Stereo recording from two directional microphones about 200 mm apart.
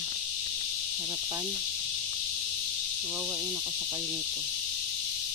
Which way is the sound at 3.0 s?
10° right (ahead or behind).